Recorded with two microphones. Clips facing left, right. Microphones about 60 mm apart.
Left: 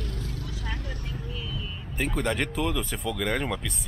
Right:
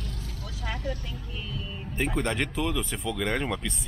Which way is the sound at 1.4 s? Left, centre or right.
Right.